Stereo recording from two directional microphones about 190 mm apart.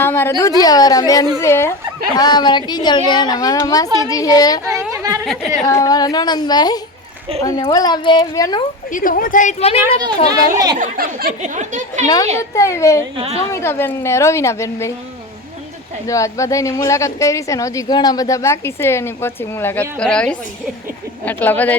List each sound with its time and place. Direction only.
0.0 s a woman's voice: 10° left (ahead or behind)
4.9 s a sound: 15° right (ahead or behind)
5.2 s speech: centre (ahead or behind)
5.6 s a woman's voice: 20° left (ahead or behind)
8.9 s a woman's voice: 45° left (ahead or behind)
10.5 s speech: 20° right (ahead or behind)
10.8 s speech: 45° right (ahead or behind)
12.0 s a woman's voice: 20° left (ahead or behind)
13.1 s a woman's voice: 30° right (ahead or behind)
13.5 s a woman's voice: 15° left (ahead or behind)
16.0 s a woman's voice: 15° left (ahead or behind)